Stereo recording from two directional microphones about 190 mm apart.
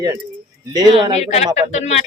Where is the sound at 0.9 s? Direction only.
35° left (ahead or behind).